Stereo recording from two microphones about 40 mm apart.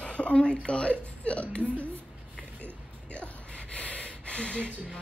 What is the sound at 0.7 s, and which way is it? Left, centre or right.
Whimper, left.